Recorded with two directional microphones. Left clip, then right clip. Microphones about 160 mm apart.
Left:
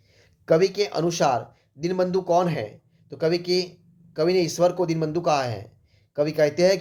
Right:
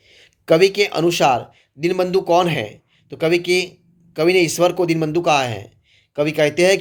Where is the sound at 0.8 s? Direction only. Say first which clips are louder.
Right 6 dB; 20° right (ahead or behind).